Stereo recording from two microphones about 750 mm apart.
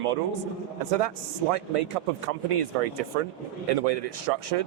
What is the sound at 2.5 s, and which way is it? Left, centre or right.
A man's voice, right.